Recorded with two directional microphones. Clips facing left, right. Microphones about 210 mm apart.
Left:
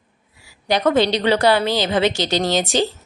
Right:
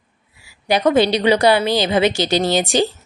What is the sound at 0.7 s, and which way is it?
A woman's voice, 10° right (ahead or behind).